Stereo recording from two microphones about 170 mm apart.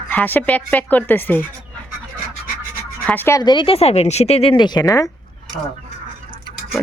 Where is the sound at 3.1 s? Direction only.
15° left (ahead or behind).